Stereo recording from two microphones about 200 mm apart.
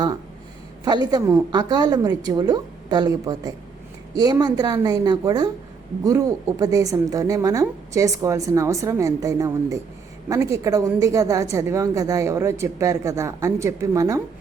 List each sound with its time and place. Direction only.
0.9 s a woman's voice: 20° right (ahead or behind)